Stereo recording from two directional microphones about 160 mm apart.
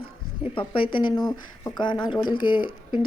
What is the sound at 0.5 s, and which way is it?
A woman's voice, 35° left (ahead or behind).